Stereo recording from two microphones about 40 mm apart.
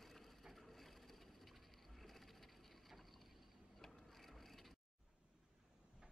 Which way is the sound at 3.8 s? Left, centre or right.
Centre.